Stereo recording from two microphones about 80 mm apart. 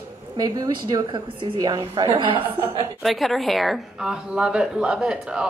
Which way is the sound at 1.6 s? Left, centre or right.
Right.